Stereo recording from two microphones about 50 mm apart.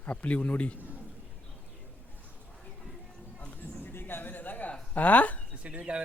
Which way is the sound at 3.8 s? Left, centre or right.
Left.